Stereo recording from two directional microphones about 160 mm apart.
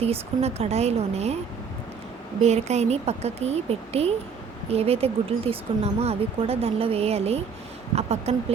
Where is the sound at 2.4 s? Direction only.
45° right (ahead or behind).